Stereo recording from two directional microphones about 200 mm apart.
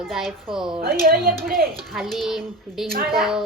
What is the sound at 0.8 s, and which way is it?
Speech, 50° right (ahead or behind).